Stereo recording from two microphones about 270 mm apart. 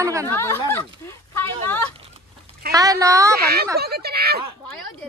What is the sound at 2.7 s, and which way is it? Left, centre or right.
Speech, centre.